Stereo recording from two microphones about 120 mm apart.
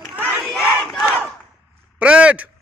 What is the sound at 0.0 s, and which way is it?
Battle cry, 15° right (ahead or behind).